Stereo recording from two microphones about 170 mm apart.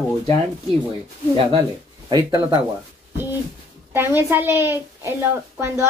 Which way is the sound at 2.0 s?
25° right (ahead or behind).